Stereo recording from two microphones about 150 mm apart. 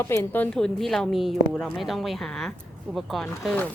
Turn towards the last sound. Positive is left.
turn(degrees=5)  # may be behind; listen again after turning